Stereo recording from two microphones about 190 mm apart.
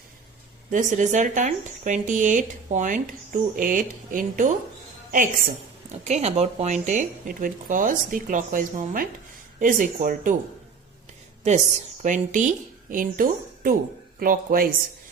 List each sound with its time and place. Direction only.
0.7 s speech: 40° right (ahead or behind)
12.0 s speech: 40° right (ahead or behind)